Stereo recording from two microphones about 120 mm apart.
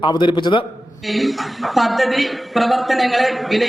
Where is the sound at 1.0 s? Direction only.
Centre (ahead or behind).